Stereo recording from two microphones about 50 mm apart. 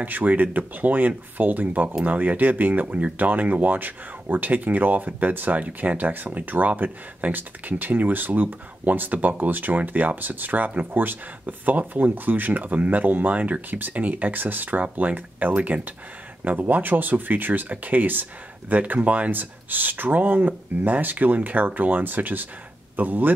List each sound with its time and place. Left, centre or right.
0.0 s speech: right